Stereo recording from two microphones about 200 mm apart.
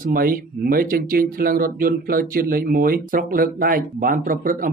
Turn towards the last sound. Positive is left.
turn(degrees=-45)  # may be behind; listen again after turning